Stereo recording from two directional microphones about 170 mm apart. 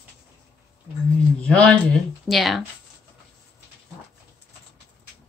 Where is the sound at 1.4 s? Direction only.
5° left (ahead or behind).